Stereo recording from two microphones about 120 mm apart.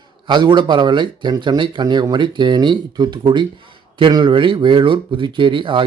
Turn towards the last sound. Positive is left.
turn(degrees=-45)  # may be behind; listen again after turning